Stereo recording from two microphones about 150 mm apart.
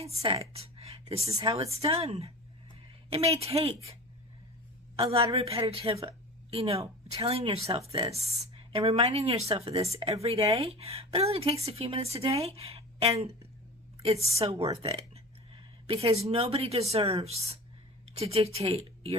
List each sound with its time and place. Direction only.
0.3 s a woman's voice: 40° right (ahead or behind)
4.9 s a woman's voice: 40° right (ahead or behind)
14.3 s a woman's voice: 40° right (ahead or behind)